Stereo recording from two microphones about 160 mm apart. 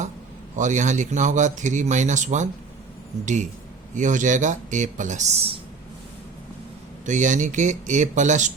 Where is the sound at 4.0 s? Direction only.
50° right (ahead or behind).